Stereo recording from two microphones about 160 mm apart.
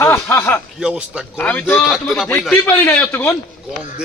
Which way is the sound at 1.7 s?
Centre (ahead or behind).